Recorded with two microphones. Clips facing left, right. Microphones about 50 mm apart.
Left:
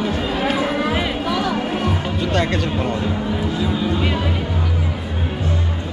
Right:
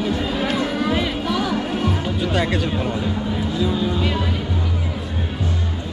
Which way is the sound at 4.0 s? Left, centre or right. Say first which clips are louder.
Left 1 dB; centre.